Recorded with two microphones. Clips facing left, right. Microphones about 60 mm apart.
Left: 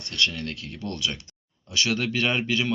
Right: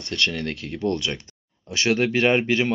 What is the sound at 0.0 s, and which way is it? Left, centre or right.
Speech, right.